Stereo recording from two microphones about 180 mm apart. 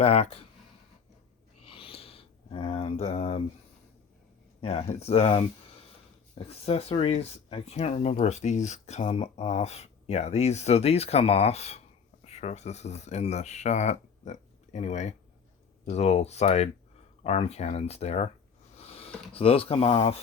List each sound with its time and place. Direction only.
0.0 s speech: 35° left (ahead or behind)
1.6 s a sound: 30° left (ahead or behind)
4.6 s speech: 35° left (ahead or behind)